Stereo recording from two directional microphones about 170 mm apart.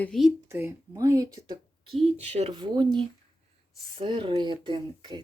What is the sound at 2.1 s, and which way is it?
Speech, 40° right (ahead or behind).